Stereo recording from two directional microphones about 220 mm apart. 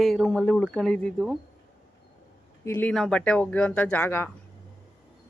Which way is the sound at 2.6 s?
10° left (ahead or behind).